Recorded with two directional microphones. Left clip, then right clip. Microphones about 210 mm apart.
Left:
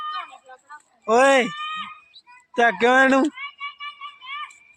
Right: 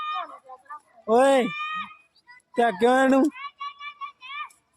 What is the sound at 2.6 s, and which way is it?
Speech, 5° right (ahead or behind).